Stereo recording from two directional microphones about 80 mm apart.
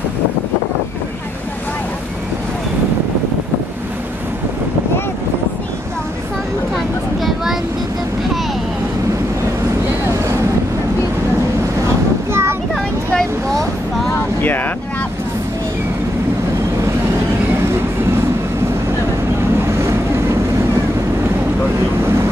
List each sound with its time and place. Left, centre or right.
7.2 s vehicle: centre
12.3 s a sound: right
14.4 s vehicle: left
22.0 s vehicle: right